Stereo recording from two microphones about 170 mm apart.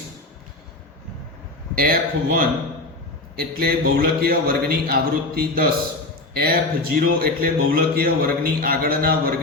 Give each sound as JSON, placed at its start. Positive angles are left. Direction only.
{"t": 1.7, "sound": "a man's voice", "side_deg": -60}